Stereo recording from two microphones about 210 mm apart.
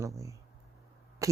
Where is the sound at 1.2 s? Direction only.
15° right (ahead or behind).